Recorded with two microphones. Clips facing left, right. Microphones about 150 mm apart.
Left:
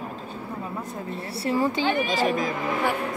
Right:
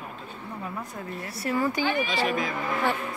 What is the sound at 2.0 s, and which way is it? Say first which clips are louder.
Speech: left 3 dB; 45° left (ahead or behind).